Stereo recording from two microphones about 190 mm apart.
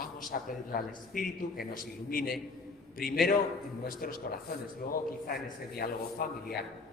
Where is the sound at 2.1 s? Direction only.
50° left (ahead or behind).